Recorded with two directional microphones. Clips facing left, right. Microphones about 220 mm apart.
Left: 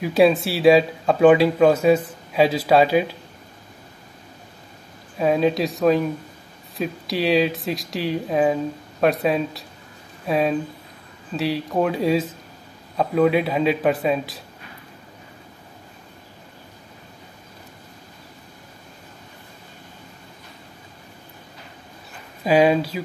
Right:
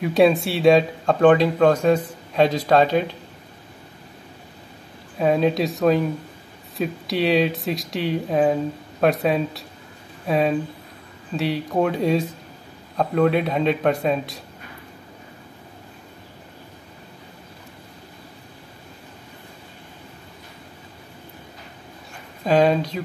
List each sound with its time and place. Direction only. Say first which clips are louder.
0.0 s speech: even; centre (ahead or behind)
5.2 s speech: even; centre (ahead or behind)
22.4 s speech: left 1 dB; 10° left (ahead or behind)